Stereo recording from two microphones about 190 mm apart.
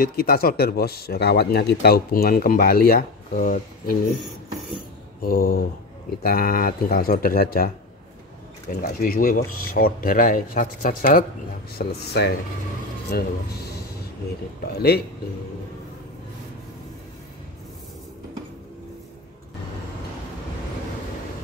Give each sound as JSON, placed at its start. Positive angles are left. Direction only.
{"t": 0.0, "sound": "speech", "side_deg": 50}
{"t": 5.2, "sound": "speech", "side_deg": 50}